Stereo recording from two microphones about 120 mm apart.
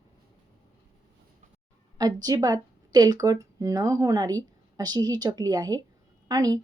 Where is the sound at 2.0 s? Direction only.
30° right (ahead or behind).